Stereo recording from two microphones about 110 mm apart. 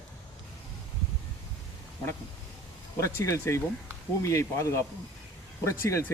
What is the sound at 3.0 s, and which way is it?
A man's voice, 25° left (ahead or behind).